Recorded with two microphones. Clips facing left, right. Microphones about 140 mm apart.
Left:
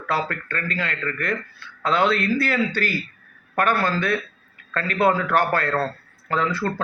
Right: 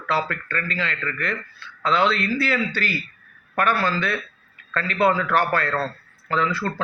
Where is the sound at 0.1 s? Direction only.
45° left (ahead or behind).